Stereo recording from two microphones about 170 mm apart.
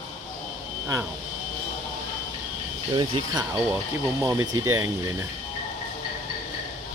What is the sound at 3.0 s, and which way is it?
Speech, 25° right (ahead or behind).